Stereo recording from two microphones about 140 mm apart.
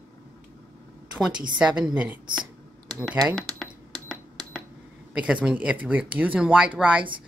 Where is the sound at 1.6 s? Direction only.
5° right (ahead or behind).